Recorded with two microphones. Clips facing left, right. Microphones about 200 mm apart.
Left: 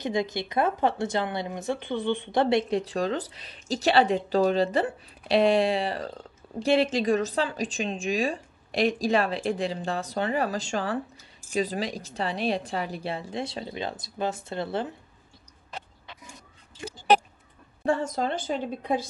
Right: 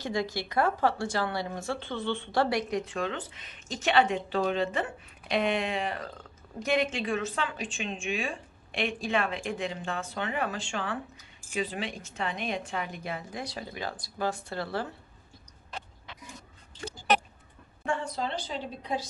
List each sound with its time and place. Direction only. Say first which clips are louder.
0.0 s speech: left 3 dB; 20° left (ahead or behind)
17.8 s a woman's voice: left 6 dB; 40° left (ahead or behind)